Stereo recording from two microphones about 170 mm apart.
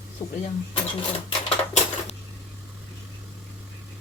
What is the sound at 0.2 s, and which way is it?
Speech, 20° left (ahead or behind).